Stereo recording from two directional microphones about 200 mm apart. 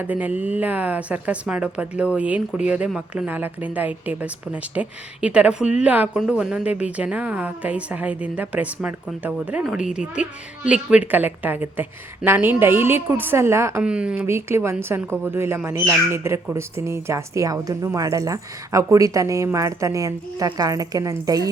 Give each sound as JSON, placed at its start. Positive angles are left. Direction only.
{"t": 0.0, "sound": "speech", "side_deg": -10}